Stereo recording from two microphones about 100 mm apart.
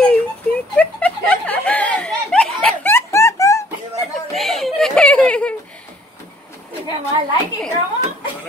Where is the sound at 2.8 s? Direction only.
25° left (ahead or behind).